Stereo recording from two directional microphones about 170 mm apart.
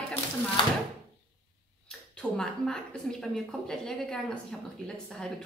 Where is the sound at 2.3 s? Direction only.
5° left (ahead or behind).